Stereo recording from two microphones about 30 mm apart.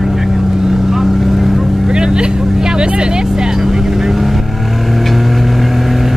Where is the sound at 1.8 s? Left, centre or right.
Right.